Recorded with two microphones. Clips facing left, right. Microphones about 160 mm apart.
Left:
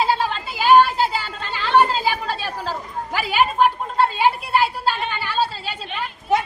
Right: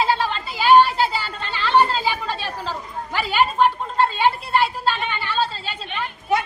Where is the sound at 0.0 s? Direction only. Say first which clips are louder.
Even; 10° left (ahead or behind).